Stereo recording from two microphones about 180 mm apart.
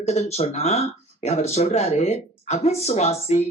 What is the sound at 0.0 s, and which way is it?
Speech, 35° left (ahead or behind).